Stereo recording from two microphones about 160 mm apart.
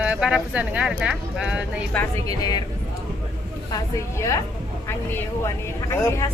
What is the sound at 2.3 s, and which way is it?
Speech, 25° left (ahead or behind).